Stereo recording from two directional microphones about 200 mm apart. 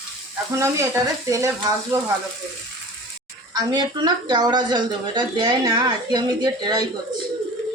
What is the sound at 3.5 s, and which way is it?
Speech, 20° right (ahead or behind).